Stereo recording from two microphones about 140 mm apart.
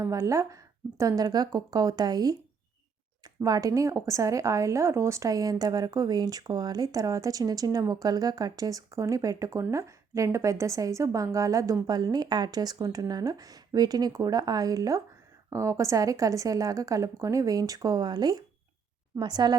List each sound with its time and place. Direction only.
0.0 s a woman's voice: 20° right (ahead or behind)
3.4 s a woman's voice: 25° right (ahead or behind)